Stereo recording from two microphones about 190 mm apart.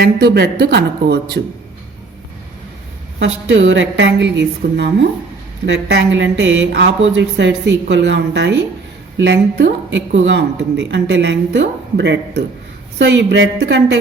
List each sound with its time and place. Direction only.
0.0 s speech: 60° right (ahead or behind)
3.2 s a woman's voice: 85° right; by 14.0 s 65° right (ahead or behind)